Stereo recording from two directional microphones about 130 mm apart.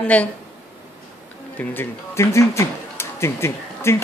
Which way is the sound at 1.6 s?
20° left (ahead or behind).